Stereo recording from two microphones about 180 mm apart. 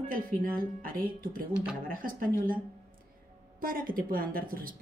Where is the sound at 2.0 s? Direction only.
50° right (ahead or behind).